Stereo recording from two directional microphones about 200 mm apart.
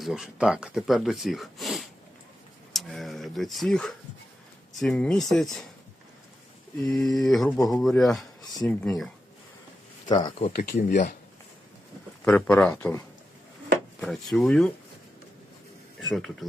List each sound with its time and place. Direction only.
0.0 s speech: centre (ahead or behind)
6.8 s speech: centre (ahead or behind)
10.1 s speech: 20° left (ahead or behind)
10.5 s speech: 45° left (ahead or behind)
12.2 s speech: 5° left (ahead or behind)
14.0 s speech: centre (ahead or behind)
16.0 s speech: centre (ahead or behind)